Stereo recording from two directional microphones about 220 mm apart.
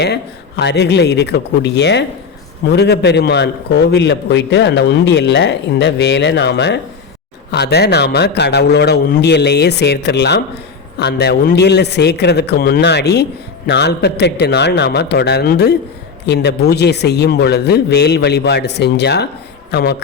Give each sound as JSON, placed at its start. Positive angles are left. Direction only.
{"t": 0.0, "sound": "a man's voice", "side_deg": 50}